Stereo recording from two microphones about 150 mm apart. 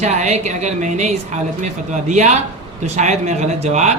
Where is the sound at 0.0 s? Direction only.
50° right (ahead or behind).